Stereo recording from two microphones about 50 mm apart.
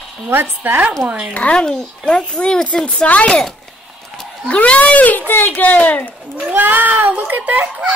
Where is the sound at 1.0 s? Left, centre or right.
Right.